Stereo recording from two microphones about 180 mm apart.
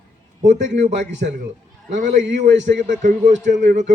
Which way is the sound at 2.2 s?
80° right.